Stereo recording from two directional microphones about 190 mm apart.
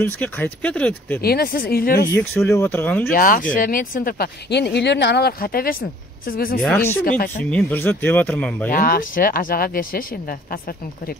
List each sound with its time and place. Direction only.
0.0 s speech: 10° left (ahead or behind)
1.2 s speech: 55° left (ahead or behind)
2.1 s speech: 10° left (ahead or behind)
3.1 s speech: 50° left (ahead or behind)
6.6 s speech: 10° left (ahead or behind)
7.1 s speech: 50° left (ahead or behind)
7.5 s speech: 10° left (ahead or behind)
8.6 s speech: 50° left (ahead or behind)